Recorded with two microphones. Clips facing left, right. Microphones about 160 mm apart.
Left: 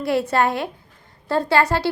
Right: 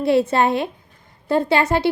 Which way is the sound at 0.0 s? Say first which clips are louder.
Right 3 dB; 25° right (ahead or behind).